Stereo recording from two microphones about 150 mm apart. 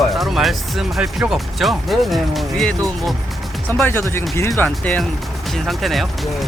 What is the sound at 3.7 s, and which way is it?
Speech, 15° left (ahead or behind).